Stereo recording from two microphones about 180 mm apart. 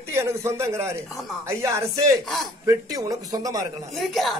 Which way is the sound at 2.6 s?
20° right (ahead or behind).